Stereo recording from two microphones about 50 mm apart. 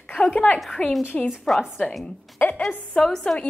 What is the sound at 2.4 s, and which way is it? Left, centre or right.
Speech, left.